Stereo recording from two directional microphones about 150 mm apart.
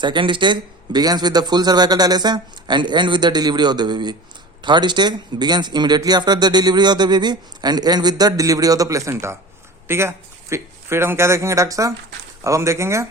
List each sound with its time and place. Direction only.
0.0 s a man's voice: 30° right (ahead or behind)